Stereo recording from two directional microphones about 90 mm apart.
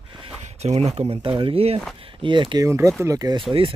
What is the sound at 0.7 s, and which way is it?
Speech, 80° right.